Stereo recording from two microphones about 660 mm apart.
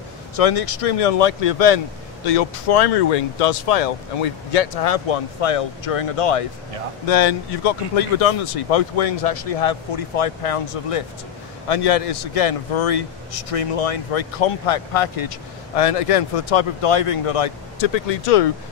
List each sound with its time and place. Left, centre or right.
0.4 s speech: left
13.5 s speech: left